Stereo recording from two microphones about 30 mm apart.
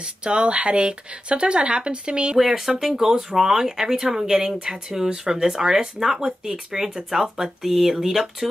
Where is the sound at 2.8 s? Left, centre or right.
Centre.